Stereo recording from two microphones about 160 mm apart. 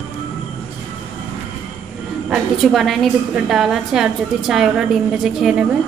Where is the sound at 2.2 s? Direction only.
Centre (ahead or behind).